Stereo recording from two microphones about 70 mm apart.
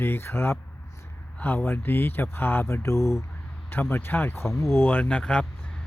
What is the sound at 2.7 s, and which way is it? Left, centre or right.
Speech, left.